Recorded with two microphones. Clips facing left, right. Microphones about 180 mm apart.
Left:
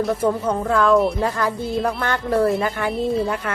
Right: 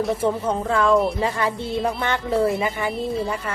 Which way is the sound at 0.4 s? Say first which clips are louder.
Left 2 dB; 5° right (ahead or behind).